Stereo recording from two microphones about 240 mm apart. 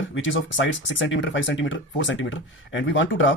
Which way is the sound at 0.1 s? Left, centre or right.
Left.